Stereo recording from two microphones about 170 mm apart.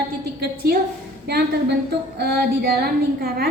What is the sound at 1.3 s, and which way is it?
A woman's voice, 70° right (ahead or behind).